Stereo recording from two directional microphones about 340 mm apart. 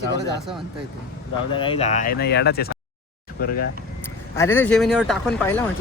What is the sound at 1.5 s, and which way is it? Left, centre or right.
Speech, centre.